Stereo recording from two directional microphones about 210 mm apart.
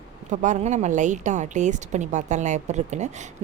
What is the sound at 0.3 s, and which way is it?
Speech, 35° right (ahead or behind).